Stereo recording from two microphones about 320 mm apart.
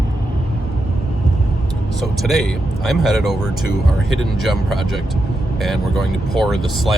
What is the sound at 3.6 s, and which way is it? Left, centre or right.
Speech, left.